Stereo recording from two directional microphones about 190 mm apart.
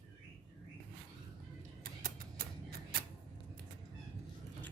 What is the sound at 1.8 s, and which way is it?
Music, 50° right (ahead or behind).